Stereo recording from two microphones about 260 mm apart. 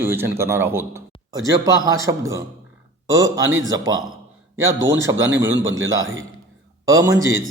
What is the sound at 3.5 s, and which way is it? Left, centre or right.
Speech, right.